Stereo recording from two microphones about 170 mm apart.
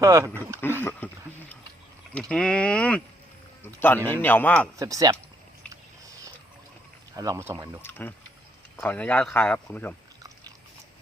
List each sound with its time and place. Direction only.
0.0 s speech: 20° right (ahead or behind)
0.8 s speech: 10° left (ahead or behind)
4.8 s speech: 20° right (ahead or behind)
7.2 s speech: 20° right (ahead or behind)
7.8 s speech: 10° left (ahead or behind)